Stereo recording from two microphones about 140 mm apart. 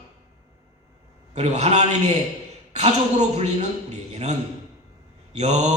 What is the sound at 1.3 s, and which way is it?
Mantra, 50° right (ahead or behind).